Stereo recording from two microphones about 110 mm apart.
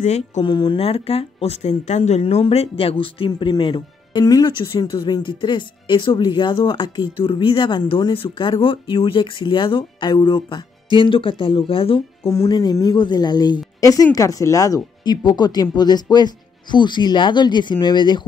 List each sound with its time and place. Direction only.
0.0 s speech: 90° left
0.4 s speech: 45° left (ahead or behind)
0.7 s speech: 65° left (ahead or behind); by 2.4 s 90° left
2.4 s speech: 65° left (ahead or behind)
12.3 s speech: 35° left (ahead or behind)